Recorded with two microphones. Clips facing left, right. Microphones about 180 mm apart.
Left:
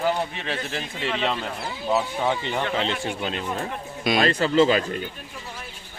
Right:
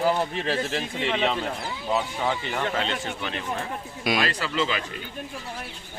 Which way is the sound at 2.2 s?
20° left (ahead or behind).